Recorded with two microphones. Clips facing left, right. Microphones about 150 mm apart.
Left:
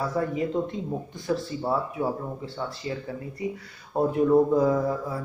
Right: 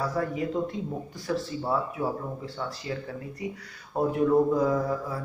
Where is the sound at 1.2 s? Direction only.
Centre (ahead or behind).